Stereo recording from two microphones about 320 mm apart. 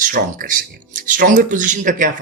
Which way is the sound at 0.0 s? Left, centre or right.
Right.